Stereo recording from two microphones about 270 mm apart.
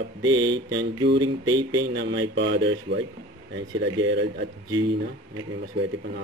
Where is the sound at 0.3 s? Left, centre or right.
Centre.